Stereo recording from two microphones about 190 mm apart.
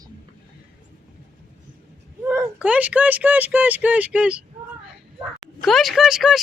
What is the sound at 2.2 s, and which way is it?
Speech, 10° right (ahead or behind).